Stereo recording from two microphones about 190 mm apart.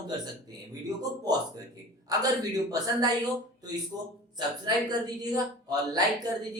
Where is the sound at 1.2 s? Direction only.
20° right (ahead or behind).